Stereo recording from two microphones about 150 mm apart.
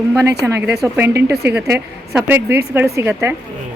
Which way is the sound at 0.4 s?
10° right (ahead or behind).